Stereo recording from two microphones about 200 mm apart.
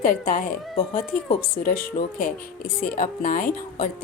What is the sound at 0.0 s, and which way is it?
A woman's voice, 45° left (ahead or behind).